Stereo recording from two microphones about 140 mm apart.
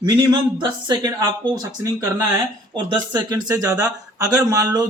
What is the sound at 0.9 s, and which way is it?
Speech, 30° right (ahead or behind).